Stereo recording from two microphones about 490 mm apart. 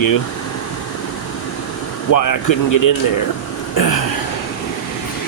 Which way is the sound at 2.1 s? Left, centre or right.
Left.